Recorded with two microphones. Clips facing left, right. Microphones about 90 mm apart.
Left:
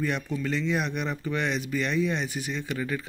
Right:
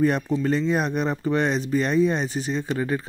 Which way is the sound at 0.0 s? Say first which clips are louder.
Right 8 dB; 40° right (ahead or behind).